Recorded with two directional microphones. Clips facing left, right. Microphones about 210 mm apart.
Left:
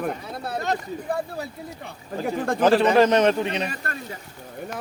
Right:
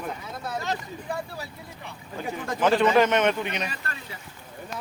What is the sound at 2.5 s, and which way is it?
A man's voice, 35° left (ahead or behind).